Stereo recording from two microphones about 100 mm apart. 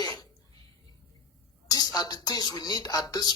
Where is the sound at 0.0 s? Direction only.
40° left (ahead or behind).